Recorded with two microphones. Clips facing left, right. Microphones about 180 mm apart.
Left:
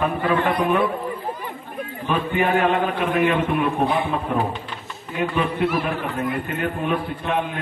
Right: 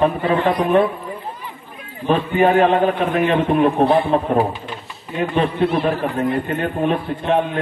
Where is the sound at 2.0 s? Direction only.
35° right (ahead or behind).